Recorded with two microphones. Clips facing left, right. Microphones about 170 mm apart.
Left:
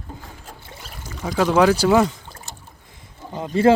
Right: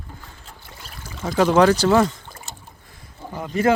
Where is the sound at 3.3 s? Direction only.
25° left (ahead or behind).